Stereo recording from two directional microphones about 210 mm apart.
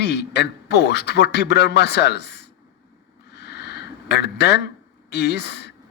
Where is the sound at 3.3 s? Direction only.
55° left (ahead or behind).